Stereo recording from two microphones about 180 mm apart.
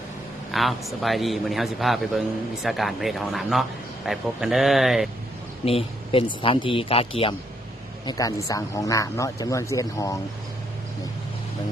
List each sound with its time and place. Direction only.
0.5 s speech: centre (ahead or behind)
5.6 s speech: 30° left (ahead or behind)
8.0 s speech: 20° left (ahead or behind)